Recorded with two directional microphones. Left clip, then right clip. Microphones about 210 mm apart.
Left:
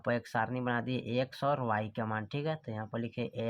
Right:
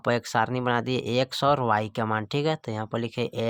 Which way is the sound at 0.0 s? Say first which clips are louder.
Right 8 dB; 40° right (ahead or behind).